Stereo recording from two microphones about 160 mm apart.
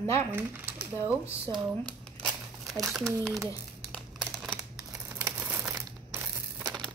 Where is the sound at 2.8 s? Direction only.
Centre (ahead or behind).